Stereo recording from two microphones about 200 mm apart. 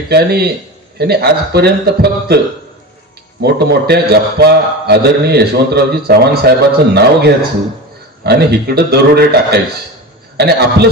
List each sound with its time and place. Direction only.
0.1 s a man's voice: 55° right (ahead or behind)